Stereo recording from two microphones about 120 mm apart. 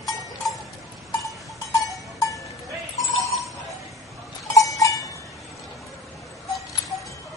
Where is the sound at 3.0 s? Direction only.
Centre (ahead or behind).